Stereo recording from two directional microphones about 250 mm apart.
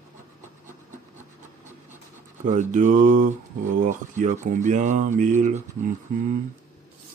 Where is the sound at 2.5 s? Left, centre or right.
Right.